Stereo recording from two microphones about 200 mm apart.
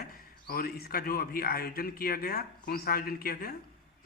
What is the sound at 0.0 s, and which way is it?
Speech, 50° left (ahead or behind).